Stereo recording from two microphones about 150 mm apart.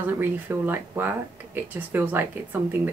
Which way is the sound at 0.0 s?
15° right (ahead or behind).